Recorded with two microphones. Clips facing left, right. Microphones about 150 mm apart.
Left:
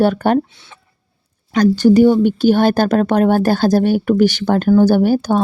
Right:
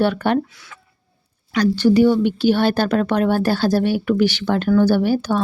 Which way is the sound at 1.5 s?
45° left (ahead or behind).